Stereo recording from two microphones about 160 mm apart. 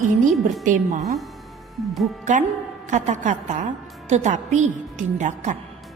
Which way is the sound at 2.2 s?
50° right (ahead or behind).